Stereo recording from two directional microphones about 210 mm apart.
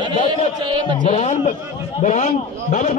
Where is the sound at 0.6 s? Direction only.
20° right (ahead or behind).